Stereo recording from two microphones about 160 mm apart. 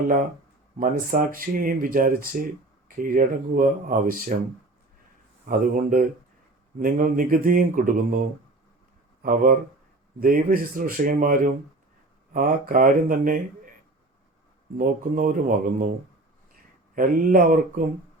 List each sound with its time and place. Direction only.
0.8 s speech: 60° right (ahead or behind)
5.5 s speech: 60° right (ahead or behind)
9.2 s speech: 60° right (ahead or behind)
14.8 s speech: 55° right (ahead or behind)
16.9 s speech: 60° right (ahead or behind)